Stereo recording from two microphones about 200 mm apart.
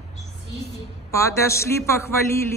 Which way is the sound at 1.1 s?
15° left (ahead or behind).